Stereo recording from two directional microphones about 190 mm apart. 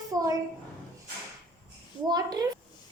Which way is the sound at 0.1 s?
20° right (ahead or behind).